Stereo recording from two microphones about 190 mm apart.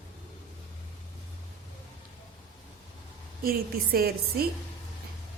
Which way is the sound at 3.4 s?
55° right (ahead or behind).